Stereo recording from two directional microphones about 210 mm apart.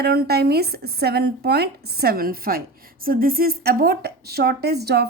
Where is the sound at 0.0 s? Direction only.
50° right (ahead or behind).